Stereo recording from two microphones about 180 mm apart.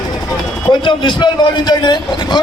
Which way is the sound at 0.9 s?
25° left (ahead or behind).